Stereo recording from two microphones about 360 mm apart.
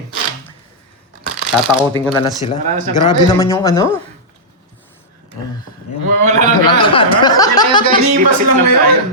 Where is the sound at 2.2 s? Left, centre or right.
Centre.